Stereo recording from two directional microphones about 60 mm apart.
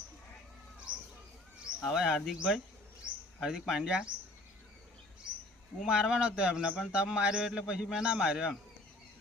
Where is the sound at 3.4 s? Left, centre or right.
Centre.